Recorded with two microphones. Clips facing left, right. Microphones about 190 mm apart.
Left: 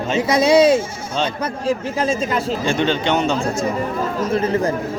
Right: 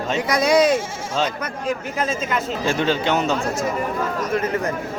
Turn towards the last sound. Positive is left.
turn(degrees=30)  # may be behind; listen again after turning